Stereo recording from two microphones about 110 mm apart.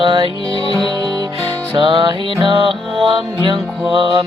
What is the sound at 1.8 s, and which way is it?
Music, 45° right (ahead or behind).